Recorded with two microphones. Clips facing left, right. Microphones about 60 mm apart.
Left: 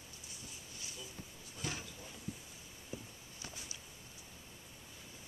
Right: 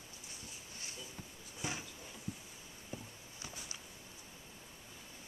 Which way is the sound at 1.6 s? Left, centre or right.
Centre.